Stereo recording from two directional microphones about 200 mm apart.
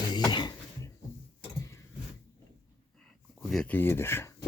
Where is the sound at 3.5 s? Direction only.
5° left (ahead or behind).